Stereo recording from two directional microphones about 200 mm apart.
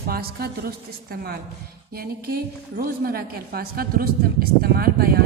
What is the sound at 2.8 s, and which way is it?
A woman's voice, 45° right (ahead or behind).